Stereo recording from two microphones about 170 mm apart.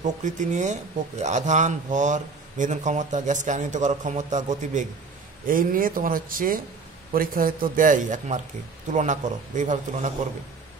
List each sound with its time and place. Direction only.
0.0 s speech: 45° right (ahead or behind)